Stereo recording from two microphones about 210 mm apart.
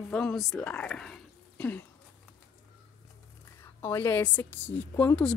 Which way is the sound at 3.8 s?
10° left (ahead or behind).